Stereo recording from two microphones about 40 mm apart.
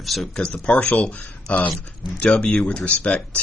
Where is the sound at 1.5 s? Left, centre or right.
Right.